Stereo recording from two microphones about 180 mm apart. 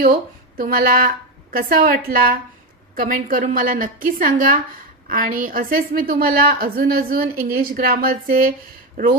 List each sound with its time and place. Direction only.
0.5 s a woman's voice: 55° right (ahead or behind)